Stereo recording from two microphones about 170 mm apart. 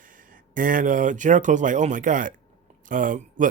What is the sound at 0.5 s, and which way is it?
Speech, 55° right (ahead or behind).